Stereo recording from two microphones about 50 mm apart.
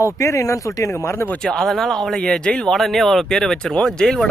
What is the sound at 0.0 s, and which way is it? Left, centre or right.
Speech, left.